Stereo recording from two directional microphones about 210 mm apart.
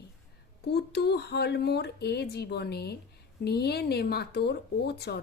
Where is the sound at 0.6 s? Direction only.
50° left (ahead or behind).